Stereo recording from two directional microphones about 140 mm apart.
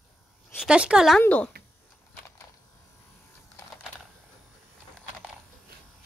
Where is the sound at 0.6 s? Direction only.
5° right (ahead or behind).